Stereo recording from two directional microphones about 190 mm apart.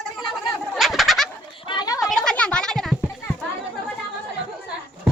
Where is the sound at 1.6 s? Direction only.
20° left (ahead or behind).